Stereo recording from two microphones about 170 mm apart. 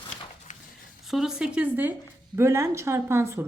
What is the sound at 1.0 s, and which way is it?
A woman's voice, centre (ahead or behind).